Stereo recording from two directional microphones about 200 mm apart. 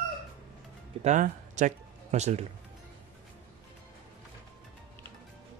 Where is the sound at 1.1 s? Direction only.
40° right (ahead or behind).